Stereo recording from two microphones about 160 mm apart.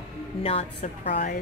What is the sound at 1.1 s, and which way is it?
Speech, 60° left (ahead or behind).